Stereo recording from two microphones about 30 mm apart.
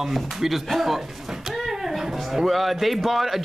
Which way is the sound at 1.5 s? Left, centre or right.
Centre.